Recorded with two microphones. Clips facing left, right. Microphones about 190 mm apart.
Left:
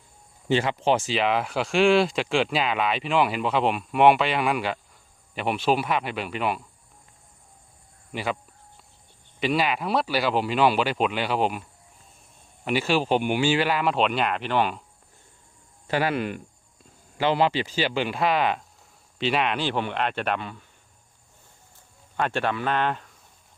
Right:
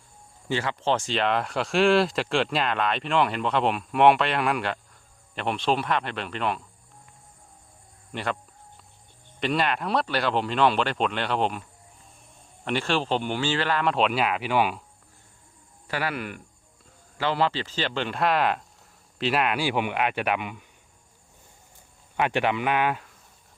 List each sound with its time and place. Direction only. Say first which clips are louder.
0.4 s speech: left 4 dB; 20° left (ahead or behind)
8.1 s speech: left 1 dB; 5° left (ahead or behind)
9.4 s speech: left 1 dB; 5° left (ahead or behind)
12.6 s speech: left 3 dB; 5° left (ahead or behind)
15.9 s speech: left 5 dB; 25° left (ahead or behind); by 20.7 s 15° right (ahead or behind)
22.2 s speech: right 1 dB; 15° right (ahead or behind)